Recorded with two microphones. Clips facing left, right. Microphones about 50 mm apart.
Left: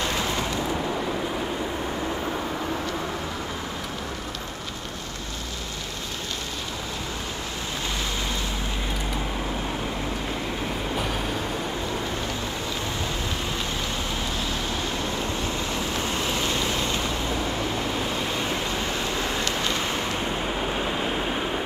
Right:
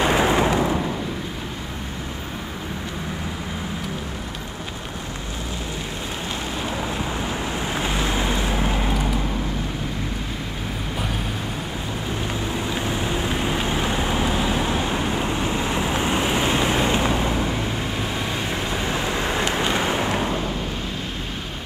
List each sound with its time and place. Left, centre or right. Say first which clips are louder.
0.0 s a sound: right 8 dB; right
7.9 s boat: right 6 dB; right
13.6 s vehicle: right 6 dB; right
19.4 s waves: right 4 dB; right